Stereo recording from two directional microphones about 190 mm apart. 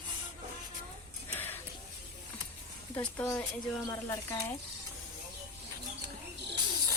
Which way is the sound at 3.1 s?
15° left (ahead or behind).